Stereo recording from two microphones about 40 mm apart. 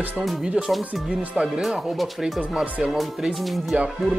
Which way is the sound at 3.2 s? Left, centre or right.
Right.